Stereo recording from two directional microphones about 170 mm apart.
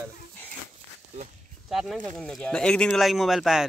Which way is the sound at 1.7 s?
Centre (ahead or behind).